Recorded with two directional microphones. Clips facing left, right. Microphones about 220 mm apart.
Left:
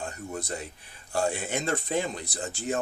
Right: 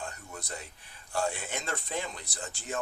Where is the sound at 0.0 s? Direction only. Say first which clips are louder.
Left 7 dB; 30° left (ahead or behind).